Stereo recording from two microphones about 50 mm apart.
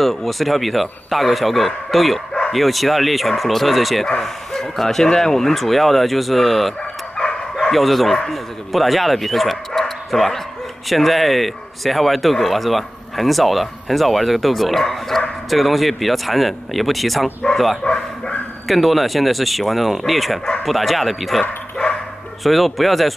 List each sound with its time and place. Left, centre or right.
0.0 s speech: centre
7.7 s speech: centre
17.8 s bow-wow: left
18.7 s speech: centre
21.4 s speech: centre
22.4 s speech: centre